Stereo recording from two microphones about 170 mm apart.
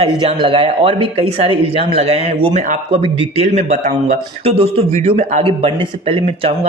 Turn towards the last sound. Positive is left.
turn(degrees=-35)  # may be behind; listen again after turning